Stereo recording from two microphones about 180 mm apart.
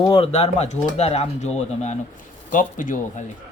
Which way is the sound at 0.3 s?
35° left (ahead or behind).